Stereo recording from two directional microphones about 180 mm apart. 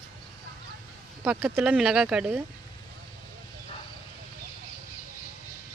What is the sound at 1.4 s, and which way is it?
Speech, 10° right (ahead or behind).